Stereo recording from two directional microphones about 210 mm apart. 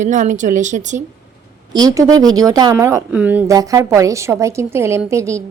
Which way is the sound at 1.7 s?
15° right (ahead or behind).